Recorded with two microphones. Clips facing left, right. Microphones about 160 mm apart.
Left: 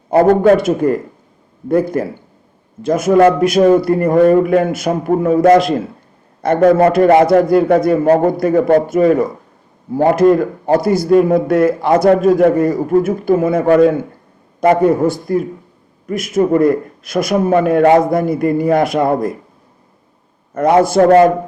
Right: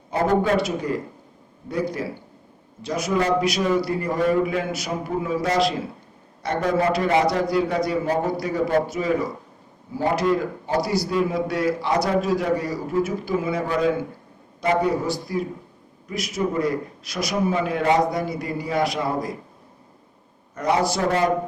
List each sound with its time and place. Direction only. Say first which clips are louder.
0.1 s a man's voice: left 11 dB; 60° left (ahead or behind)
20.5 s a man's voice: left 10 dB; 55° left (ahead or behind)